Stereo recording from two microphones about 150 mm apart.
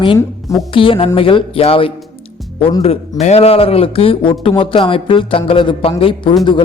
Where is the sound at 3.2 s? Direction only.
45° left (ahead or behind).